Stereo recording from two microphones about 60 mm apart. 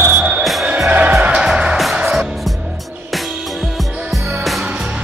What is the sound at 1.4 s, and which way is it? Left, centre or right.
Music, centre.